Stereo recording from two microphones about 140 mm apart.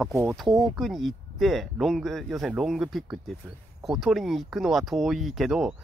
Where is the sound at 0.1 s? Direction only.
25° right (ahead or behind).